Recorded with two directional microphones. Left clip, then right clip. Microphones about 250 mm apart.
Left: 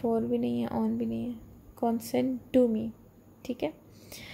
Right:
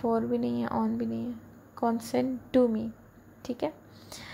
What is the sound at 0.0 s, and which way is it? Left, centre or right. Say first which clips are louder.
Speech: right 1 dB; centre.